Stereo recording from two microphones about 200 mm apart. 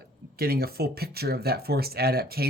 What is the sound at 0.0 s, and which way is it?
Speech, 50° right (ahead or behind).